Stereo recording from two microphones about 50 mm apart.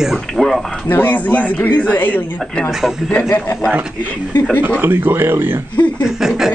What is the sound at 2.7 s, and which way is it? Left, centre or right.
Speech, centre.